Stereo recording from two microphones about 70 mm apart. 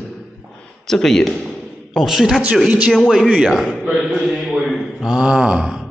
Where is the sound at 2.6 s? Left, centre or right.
Centre.